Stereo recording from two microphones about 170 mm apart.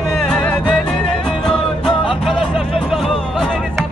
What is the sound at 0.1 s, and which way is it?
Music, 5° left (ahead or behind).